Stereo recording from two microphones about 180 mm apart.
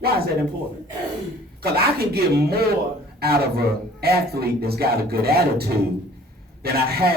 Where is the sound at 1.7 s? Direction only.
60° right (ahead or behind).